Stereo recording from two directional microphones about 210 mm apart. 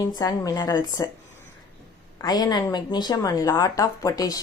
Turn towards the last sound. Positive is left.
turn(degrees=15)  # may be behind; listen again after turning